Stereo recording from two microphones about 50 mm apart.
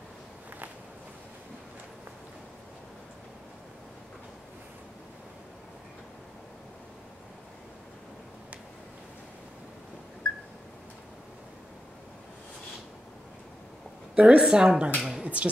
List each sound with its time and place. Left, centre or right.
14.1 s a woman's voice: centre
15.0 s music: centre
15.2 s speech: right